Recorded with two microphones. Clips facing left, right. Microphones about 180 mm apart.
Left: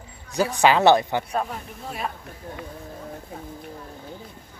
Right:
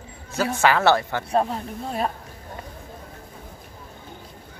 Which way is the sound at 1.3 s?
30° right (ahead or behind).